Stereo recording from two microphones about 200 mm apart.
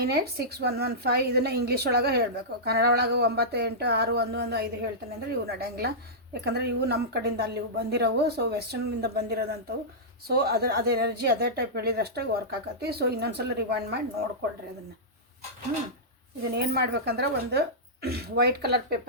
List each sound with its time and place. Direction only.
0.0 s a woman's voice: 55° right (ahead or behind)
16.6 s a woman's voice: 50° right (ahead or behind)